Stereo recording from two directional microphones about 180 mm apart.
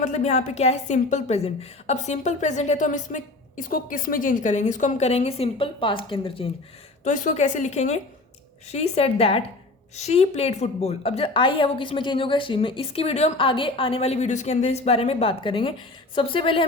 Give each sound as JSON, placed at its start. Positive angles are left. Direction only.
{"t": 0.0, "sound": "a woman's voice", "side_deg": 40}
{"t": 7.0, "sound": "a woman's voice", "side_deg": 45}